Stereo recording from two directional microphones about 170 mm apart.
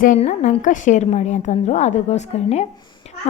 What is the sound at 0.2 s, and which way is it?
A woman's voice, 40° left (ahead or behind).